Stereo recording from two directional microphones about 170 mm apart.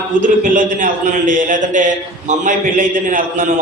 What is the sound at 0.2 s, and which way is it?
A man's voice, 50° right (ahead or behind).